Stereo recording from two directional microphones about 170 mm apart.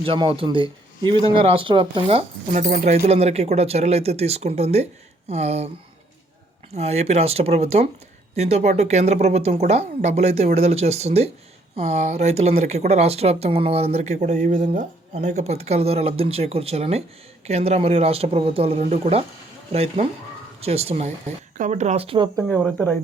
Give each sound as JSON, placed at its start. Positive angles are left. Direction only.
{"t": 0.0, "sound": "speech", "side_deg": -30}
{"t": 6.7, "sound": "speech", "side_deg": -40}